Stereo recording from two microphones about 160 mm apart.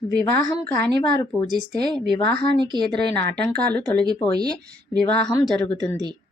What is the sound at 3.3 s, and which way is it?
Speech, 90° right.